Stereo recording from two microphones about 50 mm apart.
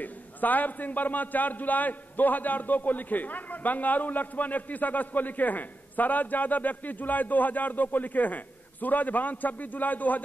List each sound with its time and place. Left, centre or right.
0.0 s a man's voice: left